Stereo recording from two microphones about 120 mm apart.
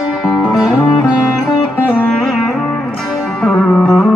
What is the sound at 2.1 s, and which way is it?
Music, centre (ahead or behind).